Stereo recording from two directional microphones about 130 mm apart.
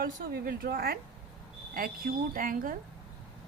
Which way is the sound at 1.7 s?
90° right.